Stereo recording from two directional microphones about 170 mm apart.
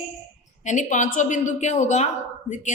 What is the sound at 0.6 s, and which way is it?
A woman's voice, 45° left (ahead or behind).